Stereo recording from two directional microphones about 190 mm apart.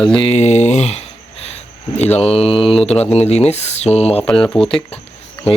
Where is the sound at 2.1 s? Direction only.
30° left (ahead or behind).